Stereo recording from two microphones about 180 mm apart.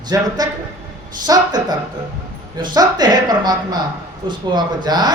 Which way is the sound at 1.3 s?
20° right (ahead or behind).